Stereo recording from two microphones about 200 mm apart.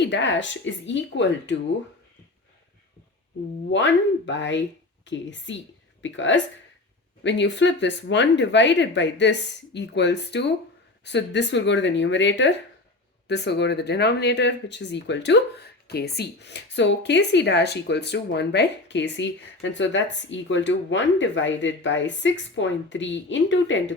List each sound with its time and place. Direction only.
0.0 s speech: 65° left (ahead or behind)
3.7 s a woman's voice: 65° left (ahead or behind)